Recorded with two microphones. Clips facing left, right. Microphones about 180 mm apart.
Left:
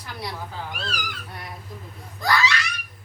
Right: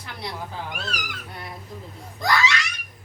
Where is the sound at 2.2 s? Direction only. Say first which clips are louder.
Even; 20° right (ahead or behind).